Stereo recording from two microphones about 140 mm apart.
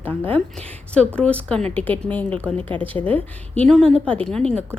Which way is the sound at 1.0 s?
10° left (ahead or behind).